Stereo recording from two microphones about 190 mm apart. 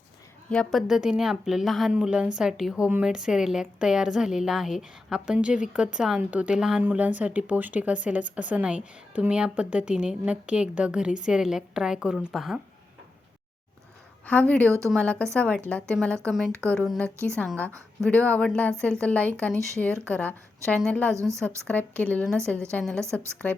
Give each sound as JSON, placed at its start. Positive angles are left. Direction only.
{"t": 0.5, "sound": "a woman's voice", "side_deg": 5}
{"t": 14.3, "sound": "a woman's voice", "side_deg": 5}
{"t": 21.2, "sound": "a woman's voice", "side_deg": -15}
{"t": 21.7, "sound": "a woman's voice", "side_deg": 10}